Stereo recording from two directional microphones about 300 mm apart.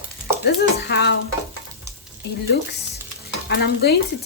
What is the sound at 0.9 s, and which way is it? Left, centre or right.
Speech, left.